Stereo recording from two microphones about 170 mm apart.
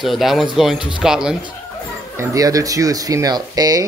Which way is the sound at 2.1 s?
15° right (ahead or behind).